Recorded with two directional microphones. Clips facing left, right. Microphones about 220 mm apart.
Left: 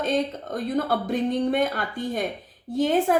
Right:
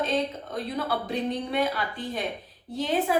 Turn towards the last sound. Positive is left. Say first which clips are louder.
# left 5 dB
turn(degrees=50)  # may be behind; listen again after turning